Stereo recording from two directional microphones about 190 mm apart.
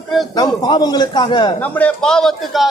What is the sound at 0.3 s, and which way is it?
A man's voice, 20° left (ahead or behind).